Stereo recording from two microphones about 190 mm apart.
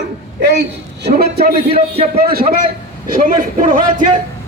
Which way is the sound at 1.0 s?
55° right (ahead or behind).